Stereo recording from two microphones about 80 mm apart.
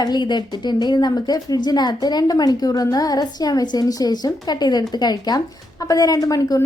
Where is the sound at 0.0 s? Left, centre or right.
Left.